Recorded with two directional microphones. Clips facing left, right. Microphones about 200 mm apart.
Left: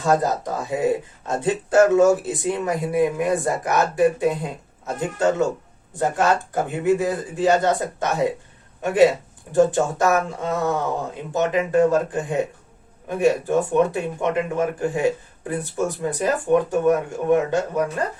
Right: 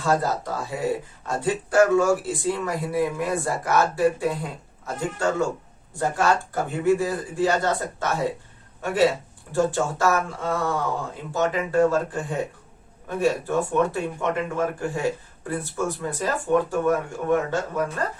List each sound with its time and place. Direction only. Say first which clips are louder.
0.0 s speech: left 3 dB; 20° left (ahead or behind)